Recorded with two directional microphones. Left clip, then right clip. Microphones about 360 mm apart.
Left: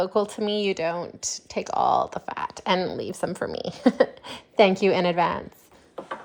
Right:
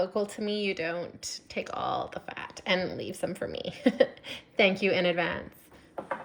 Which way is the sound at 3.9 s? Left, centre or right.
Left.